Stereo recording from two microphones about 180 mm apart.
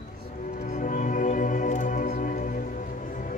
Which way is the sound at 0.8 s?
45° left (ahead or behind).